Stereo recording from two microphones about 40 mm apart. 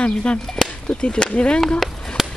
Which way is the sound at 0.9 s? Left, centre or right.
Left.